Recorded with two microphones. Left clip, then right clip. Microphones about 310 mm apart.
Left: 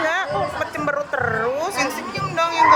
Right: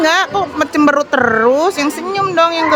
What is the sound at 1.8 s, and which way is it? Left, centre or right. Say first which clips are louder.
Speech: right 7 dB; centre.